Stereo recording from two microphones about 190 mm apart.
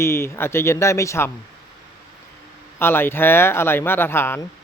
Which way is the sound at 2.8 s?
10° left (ahead or behind).